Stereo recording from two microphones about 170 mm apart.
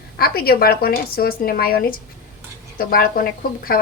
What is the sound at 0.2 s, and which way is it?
A woman's voice, 65° left (ahead or behind).